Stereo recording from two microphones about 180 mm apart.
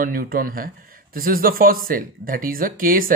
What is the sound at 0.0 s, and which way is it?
Speech, 55° right (ahead or behind).